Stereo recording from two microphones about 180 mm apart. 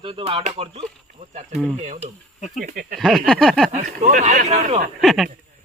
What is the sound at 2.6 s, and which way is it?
Speech, 50° right (ahead or behind).